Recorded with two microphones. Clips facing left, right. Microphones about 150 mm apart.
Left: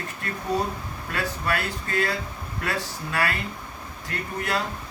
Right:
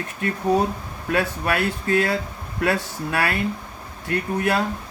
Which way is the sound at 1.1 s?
60° right (ahead or behind).